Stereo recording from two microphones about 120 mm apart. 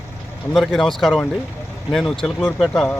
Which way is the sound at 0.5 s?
Centre (ahead or behind).